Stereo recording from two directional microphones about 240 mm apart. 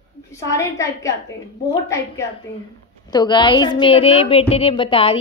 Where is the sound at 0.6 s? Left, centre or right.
Centre.